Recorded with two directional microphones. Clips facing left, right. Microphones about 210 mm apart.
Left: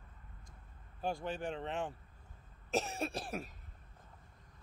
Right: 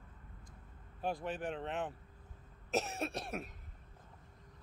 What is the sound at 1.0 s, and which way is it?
Speech, centre (ahead or behind).